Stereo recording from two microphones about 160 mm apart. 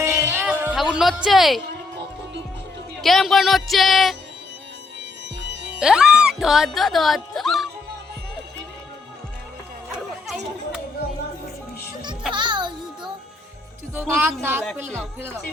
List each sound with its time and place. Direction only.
0.0 s music: 15° right (ahead or behind)
0.8 s speech: centre (ahead or behind)
3.0 s speech: centre (ahead or behind)
5.8 s speech: 5° right (ahead or behind)
9.9 s chatter: centre (ahead or behind)
12.3 s music: 30° right (ahead or behind)
13.9 s speech: 10° right (ahead or behind)